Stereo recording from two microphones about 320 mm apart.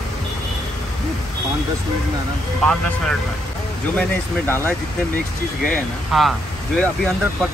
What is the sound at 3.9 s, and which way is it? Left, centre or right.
Speech, centre.